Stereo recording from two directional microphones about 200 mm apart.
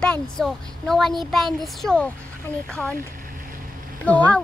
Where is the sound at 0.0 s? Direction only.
Centre (ahead or behind).